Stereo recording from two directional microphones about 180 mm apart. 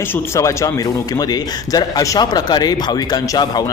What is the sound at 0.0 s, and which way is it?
Speech, 15° left (ahead or behind).